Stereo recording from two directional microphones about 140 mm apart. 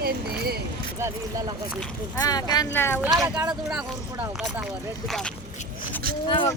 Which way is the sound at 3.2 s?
20° right (ahead or behind).